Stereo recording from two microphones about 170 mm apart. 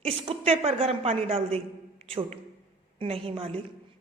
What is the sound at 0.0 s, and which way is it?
A woman's voice, 35° right (ahead or behind).